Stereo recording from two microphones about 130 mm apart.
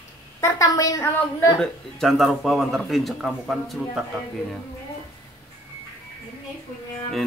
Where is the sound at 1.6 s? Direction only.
Centre (ahead or behind).